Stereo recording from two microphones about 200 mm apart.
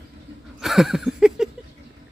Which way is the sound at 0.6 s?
Centre (ahead or behind).